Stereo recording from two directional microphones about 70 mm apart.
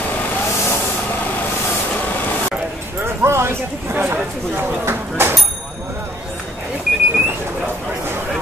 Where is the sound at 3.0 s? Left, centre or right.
Right.